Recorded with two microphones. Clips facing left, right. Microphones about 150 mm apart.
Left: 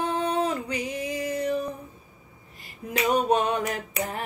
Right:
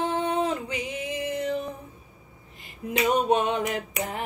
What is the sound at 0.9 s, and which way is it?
Music, 40° left (ahead or behind).